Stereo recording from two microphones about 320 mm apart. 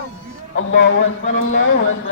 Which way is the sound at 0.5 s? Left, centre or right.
Left.